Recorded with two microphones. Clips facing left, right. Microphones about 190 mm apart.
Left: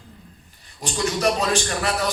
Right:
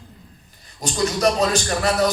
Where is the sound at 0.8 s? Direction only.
35° right (ahead or behind).